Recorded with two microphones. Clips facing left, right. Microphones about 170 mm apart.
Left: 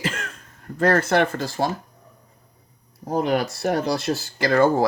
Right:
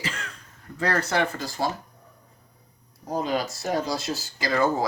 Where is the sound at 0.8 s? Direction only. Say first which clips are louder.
Left 6 dB; 50° left (ahead or behind).